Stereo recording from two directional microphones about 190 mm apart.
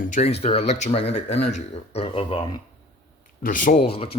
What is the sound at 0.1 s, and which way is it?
Speech, 35° left (ahead or behind).